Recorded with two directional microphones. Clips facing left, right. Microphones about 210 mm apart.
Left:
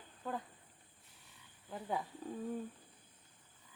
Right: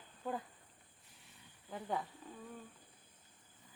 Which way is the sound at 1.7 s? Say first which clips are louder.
Even; 5° left (ahead or behind).